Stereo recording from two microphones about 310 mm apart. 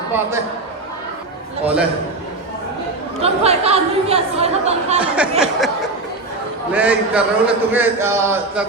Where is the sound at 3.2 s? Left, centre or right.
Centre.